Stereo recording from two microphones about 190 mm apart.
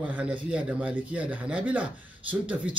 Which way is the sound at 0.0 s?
10° right (ahead or behind).